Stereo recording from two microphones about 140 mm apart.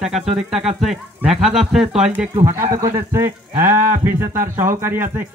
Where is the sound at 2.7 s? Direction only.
20° right (ahead or behind).